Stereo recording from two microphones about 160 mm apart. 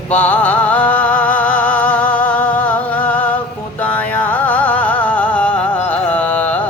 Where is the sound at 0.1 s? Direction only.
10° left (ahead or behind).